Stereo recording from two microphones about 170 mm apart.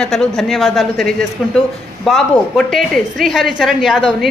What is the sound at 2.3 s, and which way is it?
A woman's voice, 5° left (ahead or behind).